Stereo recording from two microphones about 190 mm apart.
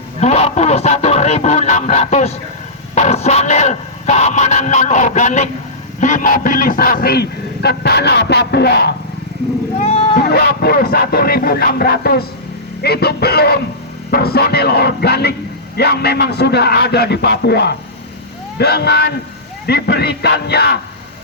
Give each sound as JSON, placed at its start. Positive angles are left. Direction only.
{"t": 0.2, "sound": "fowl", "side_deg": 35}
{"t": 2.9, "sound": "music", "side_deg": 35}
{"t": 6.0, "sound": "a man's voice", "side_deg": 40}
{"t": 9.8, "sound": "speech", "side_deg": 30}
{"t": 10.2, "sound": "a man's voice", "side_deg": 55}